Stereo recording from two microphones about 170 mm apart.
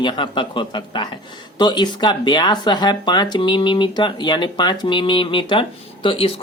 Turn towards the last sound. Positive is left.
turn(degrees=35)  # may be behind; listen again after turning